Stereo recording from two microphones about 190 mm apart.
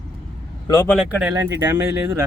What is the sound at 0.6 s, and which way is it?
Speech, 15° left (ahead or behind).